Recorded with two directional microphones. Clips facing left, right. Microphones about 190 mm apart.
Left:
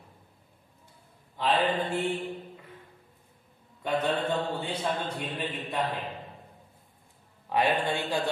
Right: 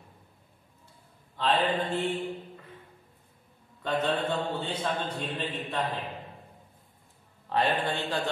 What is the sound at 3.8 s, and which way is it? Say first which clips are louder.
Mantra: left 1 dB; 10° left (ahead or behind).